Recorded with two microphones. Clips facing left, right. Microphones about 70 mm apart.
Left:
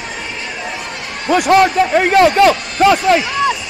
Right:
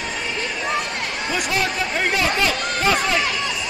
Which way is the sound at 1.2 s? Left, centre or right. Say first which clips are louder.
Left 14 dB; left.